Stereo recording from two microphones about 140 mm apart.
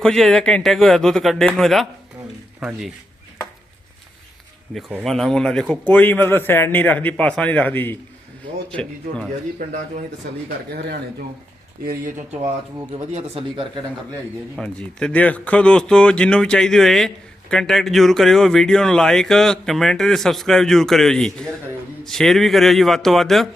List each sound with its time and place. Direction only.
0.0 s speech: 5° left (ahead or behind)
4.7 s a man's voice: 5° right (ahead or behind)
11.9 s speech: 70° right (ahead or behind)
12.9 s speech: 45° right (ahead or behind)
14.6 s a man's voice: 5° left (ahead or behind)